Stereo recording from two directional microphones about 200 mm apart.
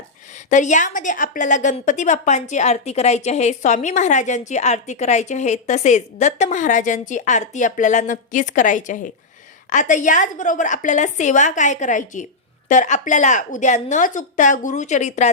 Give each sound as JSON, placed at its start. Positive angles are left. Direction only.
{"t": 0.5, "sound": "a woman's voice", "side_deg": 40}